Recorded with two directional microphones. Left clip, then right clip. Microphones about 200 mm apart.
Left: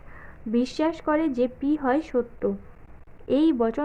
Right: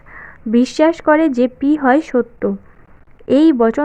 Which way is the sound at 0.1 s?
35° right (ahead or behind).